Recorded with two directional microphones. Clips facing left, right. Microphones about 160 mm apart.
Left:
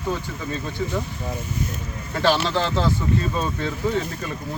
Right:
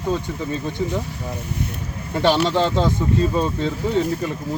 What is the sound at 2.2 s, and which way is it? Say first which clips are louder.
Speech: right 3 dB; 15° right (ahead or behind).